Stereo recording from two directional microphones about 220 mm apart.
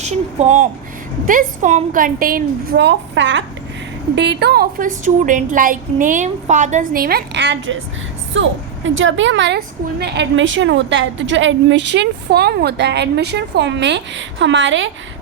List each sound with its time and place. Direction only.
0.0 s a woman's voice: 30° right (ahead or behind); by 14.9 s 55° right (ahead or behind)